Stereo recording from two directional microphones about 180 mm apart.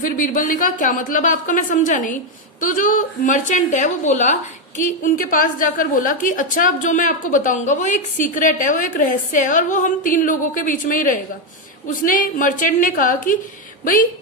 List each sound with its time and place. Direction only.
0.0 s a woman's voice: 50° left (ahead or behind)